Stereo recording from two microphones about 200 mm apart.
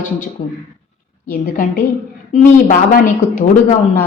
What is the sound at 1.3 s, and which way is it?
A woman's voice, 45° left (ahead or behind).